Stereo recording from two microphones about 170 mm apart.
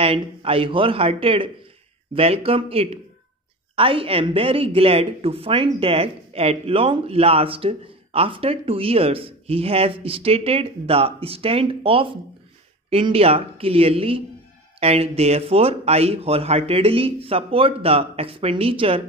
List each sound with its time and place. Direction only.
0.0 s speech: 35° right (ahead or behind)